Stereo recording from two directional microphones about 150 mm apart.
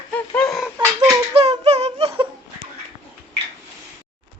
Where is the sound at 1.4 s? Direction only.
45° right (ahead or behind).